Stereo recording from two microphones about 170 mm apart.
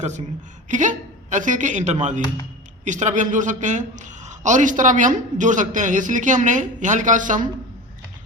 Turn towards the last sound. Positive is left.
turn(degrees=-50)  # may be behind; listen again after turning